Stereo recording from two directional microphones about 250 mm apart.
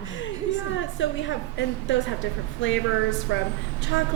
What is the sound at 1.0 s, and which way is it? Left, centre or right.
A woman's voice, left.